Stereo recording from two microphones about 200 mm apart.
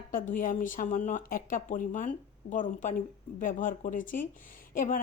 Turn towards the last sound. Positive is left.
turn(degrees=45)  # may be behind; listen again after turning